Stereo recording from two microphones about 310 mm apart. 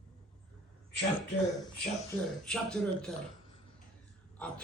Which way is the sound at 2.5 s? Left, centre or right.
Centre.